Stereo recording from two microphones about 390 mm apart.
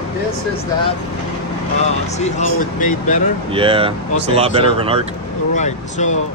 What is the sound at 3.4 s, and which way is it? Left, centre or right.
Speech, centre.